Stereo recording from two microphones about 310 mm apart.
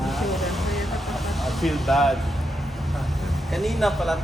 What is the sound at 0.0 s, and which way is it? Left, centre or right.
Vehicle, centre.